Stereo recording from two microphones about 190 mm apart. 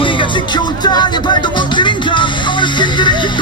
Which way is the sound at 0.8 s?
20° left (ahead or behind).